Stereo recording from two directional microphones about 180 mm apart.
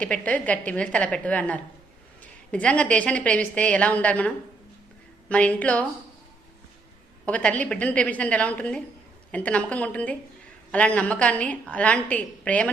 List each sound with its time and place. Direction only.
0.0 s a woman's voice: 5° left (ahead or behind)
5.3 s a woman's voice: 5° left (ahead or behind)
7.3 s a woman's voice: 5° left (ahead or behind)